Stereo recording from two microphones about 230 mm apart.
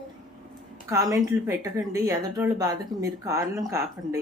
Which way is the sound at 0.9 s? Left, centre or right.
Centre.